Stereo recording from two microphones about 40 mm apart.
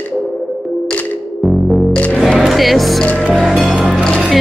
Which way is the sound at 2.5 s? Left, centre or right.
Centre.